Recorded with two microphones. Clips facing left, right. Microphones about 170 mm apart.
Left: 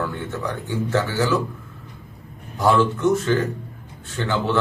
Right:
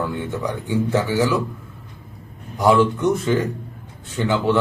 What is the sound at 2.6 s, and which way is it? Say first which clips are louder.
A man's voice: right 2 dB; 15° right (ahead or behind).